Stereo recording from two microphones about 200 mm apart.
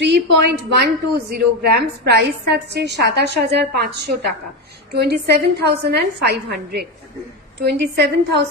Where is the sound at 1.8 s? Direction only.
55° right (ahead or behind).